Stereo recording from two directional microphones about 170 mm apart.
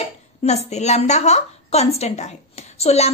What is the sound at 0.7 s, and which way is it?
A woman's voice, 40° left (ahead or behind).